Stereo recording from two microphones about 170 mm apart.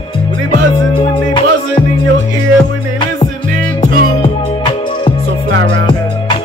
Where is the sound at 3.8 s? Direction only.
35° left (ahead or behind).